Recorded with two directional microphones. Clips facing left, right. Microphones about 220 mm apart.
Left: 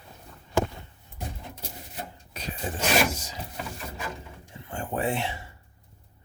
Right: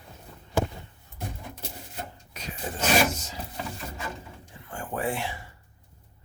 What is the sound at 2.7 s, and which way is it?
Wood, 15° left (ahead or behind).